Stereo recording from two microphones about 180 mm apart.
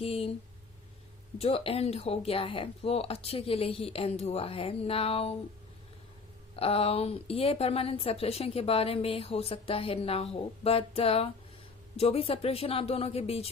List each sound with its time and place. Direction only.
0.0 s a woman's voice: 30° left (ahead or behind)
1.4 s a woman's voice: 35° left (ahead or behind)
6.6 s a woman's voice: 35° left (ahead or behind)